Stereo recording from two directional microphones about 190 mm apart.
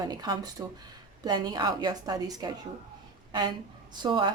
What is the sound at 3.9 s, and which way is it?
Speech, 25° right (ahead or behind).